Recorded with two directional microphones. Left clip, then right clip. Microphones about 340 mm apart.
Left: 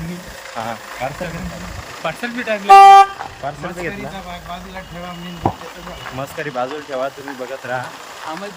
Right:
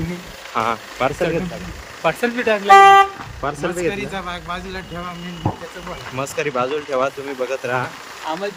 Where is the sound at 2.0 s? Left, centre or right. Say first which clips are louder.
Right 5 dB; centre.